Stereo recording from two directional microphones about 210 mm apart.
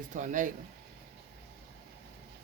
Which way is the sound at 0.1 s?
40° right (ahead or behind).